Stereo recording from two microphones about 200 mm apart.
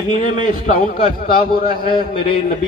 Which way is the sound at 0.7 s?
45° left (ahead or behind).